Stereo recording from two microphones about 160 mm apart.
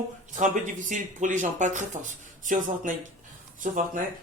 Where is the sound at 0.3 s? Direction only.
50° right (ahead or behind).